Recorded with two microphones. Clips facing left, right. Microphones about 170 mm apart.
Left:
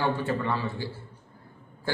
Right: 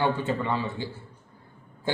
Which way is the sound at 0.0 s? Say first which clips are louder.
Right 1 dB; 20° right (ahead or behind).